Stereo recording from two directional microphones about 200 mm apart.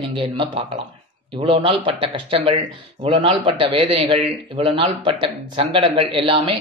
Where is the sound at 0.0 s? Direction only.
25° right (ahead or behind).